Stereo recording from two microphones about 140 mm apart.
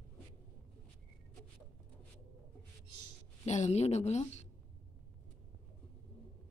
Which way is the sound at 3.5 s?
55° left (ahead or behind).